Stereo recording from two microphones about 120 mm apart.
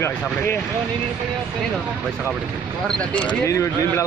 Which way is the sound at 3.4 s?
25° left (ahead or behind).